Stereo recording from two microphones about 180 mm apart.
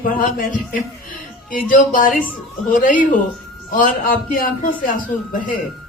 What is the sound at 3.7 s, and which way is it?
Speech, 50° left (ahead or behind).